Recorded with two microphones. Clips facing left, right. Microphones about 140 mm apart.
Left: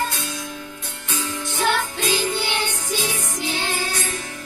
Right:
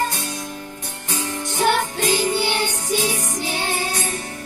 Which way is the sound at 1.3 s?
50° right (ahead or behind).